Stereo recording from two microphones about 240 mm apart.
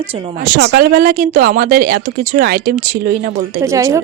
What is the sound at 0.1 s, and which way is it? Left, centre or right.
Speech, right.